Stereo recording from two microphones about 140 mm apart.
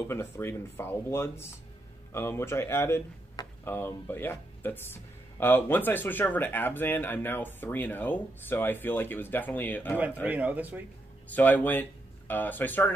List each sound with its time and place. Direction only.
0.1 s speech: 15° left (ahead or behind)
10.2 s speech: 10° right (ahead or behind)
11.3 s speech: 10° left (ahead or behind)